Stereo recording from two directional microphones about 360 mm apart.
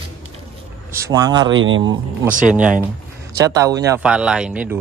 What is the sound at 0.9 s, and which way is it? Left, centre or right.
Speech, centre.